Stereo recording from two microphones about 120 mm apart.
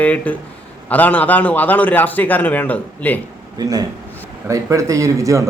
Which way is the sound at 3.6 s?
35° right (ahead or behind).